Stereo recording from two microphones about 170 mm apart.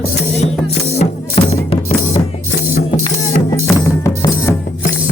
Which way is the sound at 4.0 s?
15° left (ahead or behind).